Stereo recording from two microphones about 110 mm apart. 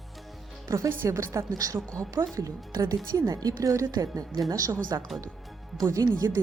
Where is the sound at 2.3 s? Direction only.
30° right (ahead or behind).